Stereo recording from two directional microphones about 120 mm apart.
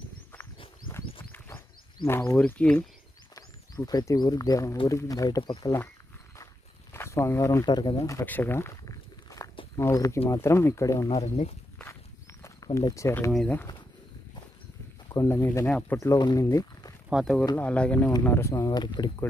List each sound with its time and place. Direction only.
2.0 s speech: 20° left (ahead or behind)
3.3 s speech: 30° left (ahead or behind)
5.4 s speech: 40° left (ahead or behind)
6.3 s walk: 25° left (ahead or behind)
7.6 s speech: 35° left (ahead or behind)
8.3 s walk: 15° left (ahead or behind)
9.8 s speech: 25° left (ahead or behind)
11.1 s speech: 65° left (ahead or behind)
11.8 s walk: 25° left (ahead or behind)
12.7 s speech: 25° left (ahead or behind)
15.0 s speech: 25° left (ahead or behind)
16.0 s speech: 25° left (ahead or behind)
17.1 s speech: centre (ahead or behind); by 19.2 s 35° left (ahead or behind)